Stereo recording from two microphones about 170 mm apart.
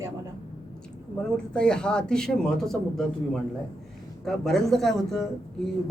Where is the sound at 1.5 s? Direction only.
5° left (ahead or behind).